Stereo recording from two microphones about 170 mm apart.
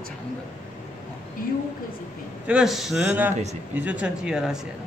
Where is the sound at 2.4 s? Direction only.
5° right (ahead or behind).